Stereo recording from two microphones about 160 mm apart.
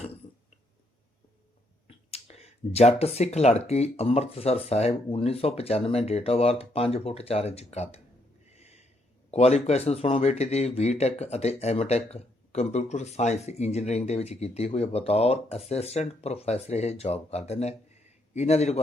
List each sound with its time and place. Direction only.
1.9 s speech: 40° left (ahead or behind)
8.4 s a sound: 40° left (ahead or behind)
9.3 s a man's voice: 40° left (ahead or behind)